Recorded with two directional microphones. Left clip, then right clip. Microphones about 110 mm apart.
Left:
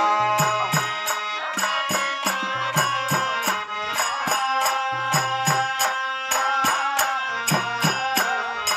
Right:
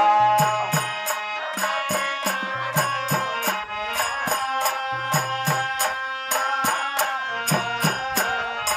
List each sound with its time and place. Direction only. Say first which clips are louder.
0.0 s music: right 3 dB; 30° right (ahead or behind)
2.7 s music: left 1 dB; 30° right (ahead or behind)